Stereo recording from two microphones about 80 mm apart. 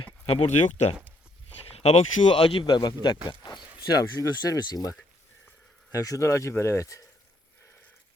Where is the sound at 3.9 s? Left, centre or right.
Left.